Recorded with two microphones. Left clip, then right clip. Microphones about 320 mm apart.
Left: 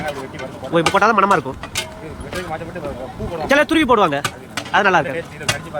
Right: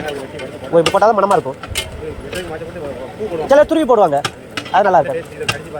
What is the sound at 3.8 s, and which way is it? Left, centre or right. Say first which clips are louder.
Speech: right 3 dB; left.